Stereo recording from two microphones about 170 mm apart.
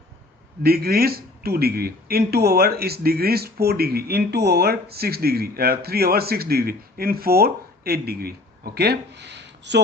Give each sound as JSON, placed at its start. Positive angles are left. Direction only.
{"t": 0.6, "sound": "speech", "side_deg": -65}